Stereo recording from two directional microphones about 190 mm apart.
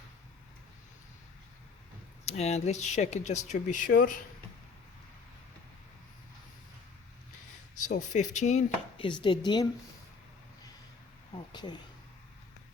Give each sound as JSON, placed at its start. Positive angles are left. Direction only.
{"t": 2.2, "sound": "speech", "side_deg": 35}
{"t": 7.9, "sound": "speech", "side_deg": 40}
{"t": 9.0, "sound": "speech", "side_deg": 25}
{"t": 11.5, "sound": "speech", "side_deg": 20}